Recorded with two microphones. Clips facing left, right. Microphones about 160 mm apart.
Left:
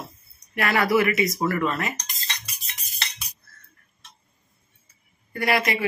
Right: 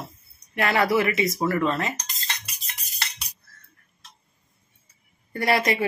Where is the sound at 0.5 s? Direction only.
25° right (ahead or behind).